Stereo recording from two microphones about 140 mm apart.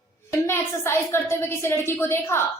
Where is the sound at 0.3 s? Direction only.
15° left (ahead or behind).